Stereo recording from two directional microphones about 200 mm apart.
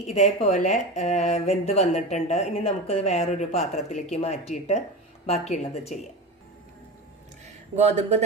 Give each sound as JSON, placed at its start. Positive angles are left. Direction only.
{"t": 0.0, "sound": "speech", "side_deg": 35}
{"t": 7.4, "sound": "speech", "side_deg": -35}